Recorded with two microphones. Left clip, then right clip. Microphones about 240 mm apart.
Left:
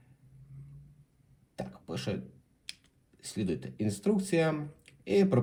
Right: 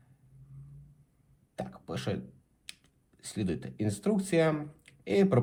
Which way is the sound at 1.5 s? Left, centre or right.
Centre.